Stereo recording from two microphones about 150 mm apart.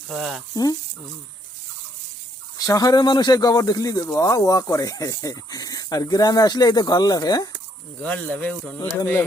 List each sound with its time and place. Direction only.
0.1 s speech: centre (ahead or behind)
0.5 s speech: 25° left (ahead or behind)
2.6 s speech: 25° left (ahead or behind)
8.0 s speech: 10° left (ahead or behind)